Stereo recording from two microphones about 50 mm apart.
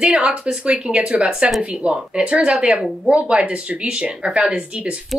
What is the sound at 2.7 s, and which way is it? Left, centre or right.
Speech, centre.